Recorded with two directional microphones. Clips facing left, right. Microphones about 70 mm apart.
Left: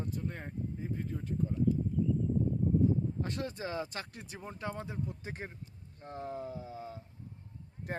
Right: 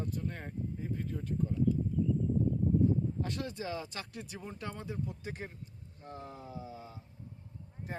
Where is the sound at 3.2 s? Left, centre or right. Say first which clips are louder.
Even; left.